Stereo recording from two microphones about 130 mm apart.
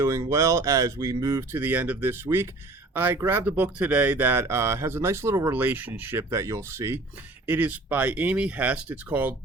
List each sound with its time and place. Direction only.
0.0 s speech: 20° right (ahead or behind)
1.5 s speech: 15° right (ahead or behind)